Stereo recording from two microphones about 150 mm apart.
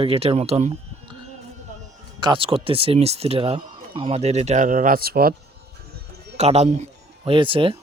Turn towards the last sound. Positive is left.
turn(degrees=-35)  # may be behind; listen again after turning